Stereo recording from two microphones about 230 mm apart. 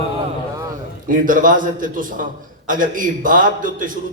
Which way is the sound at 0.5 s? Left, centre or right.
Centre.